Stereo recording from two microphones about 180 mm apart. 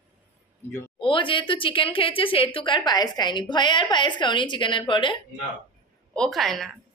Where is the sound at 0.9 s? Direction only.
30° left (ahead or behind).